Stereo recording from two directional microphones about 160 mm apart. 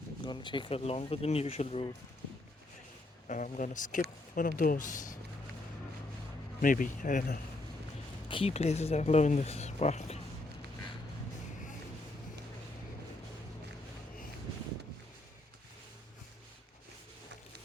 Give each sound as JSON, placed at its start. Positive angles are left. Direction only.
{"t": 0.3, "sound": "speech", "side_deg": 30}
{"t": 3.2, "sound": "speech", "side_deg": 50}
{"t": 6.6, "sound": "speech", "side_deg": 60}
{"t": 8.3, "sound": "speech", "side_deg": 35}